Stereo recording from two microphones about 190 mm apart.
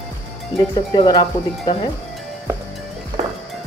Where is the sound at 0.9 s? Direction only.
20° left (ahead or behind).